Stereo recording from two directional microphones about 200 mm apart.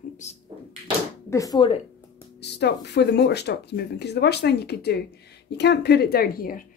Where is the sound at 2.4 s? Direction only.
55° left (ahead or behind).